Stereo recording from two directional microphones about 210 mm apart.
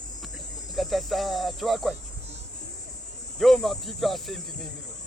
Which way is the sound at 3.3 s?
Centre (ahead or behind).